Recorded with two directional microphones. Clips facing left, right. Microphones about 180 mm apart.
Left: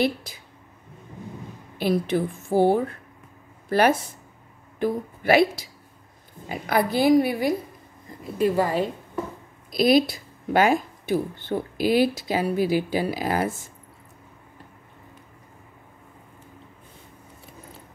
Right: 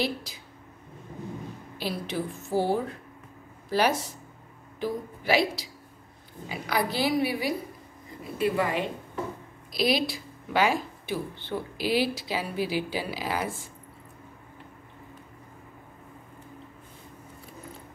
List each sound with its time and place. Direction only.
0.0 s speech: 50° left (ahead or behind)
1.8 s speech: 50° left (ahead or behind)
8.4 s a woman's voice: 40° left (ahead or behind)
9.7 s speech: 50° left (ahead or behind)